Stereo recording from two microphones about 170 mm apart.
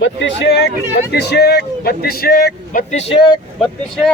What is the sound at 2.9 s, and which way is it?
Speech, 30° left (ahead or behind).